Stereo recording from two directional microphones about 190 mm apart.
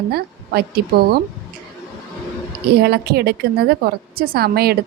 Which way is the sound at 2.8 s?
55° right (ahead or behind).